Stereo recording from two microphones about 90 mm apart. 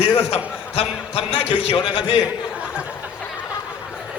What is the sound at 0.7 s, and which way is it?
A man's voice, 90° left.